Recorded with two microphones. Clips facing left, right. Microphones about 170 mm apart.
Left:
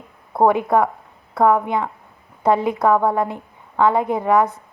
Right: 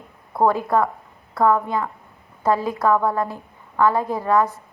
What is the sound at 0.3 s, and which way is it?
A woman's voice, 20° left (ahead or behind).